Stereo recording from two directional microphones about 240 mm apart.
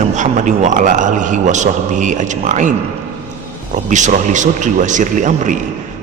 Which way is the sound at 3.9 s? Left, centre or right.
Right.